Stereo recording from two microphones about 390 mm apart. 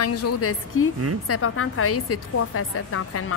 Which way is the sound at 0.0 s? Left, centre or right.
Left.